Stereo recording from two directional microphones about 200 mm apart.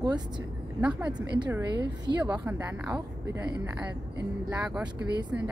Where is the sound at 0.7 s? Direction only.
5° right (ahead or behind).